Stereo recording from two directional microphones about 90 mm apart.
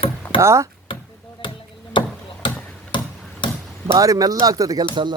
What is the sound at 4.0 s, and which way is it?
Speech, 40° right (ahead or behind).